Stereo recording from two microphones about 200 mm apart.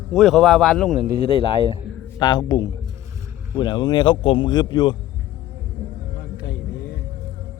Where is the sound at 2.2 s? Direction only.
20° left (ahead or behind).